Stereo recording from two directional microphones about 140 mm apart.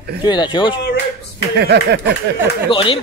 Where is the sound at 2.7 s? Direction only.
40° left (ahead or behind).